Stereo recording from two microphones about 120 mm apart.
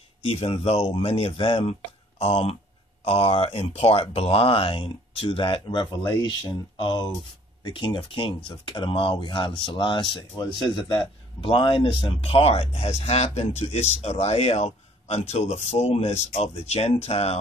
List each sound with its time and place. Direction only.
0.2 s a man's voice: 55° left (ahead or behind)